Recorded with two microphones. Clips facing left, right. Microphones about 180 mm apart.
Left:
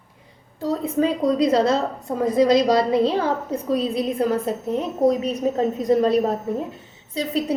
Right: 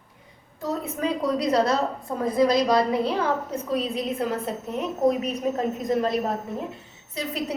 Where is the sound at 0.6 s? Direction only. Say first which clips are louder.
Left 6 dB; 30° left (ahead or behind).